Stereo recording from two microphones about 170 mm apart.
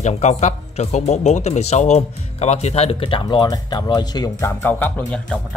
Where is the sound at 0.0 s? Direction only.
40° left (ahead or behind); by 4.5 s 25° left (ahead or behind).